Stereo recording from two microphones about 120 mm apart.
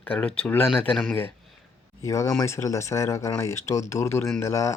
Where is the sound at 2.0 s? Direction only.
25° left (ahead or behind).